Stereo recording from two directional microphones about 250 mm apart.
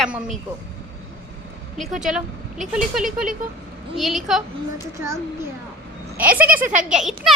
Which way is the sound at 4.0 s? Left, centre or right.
Centre.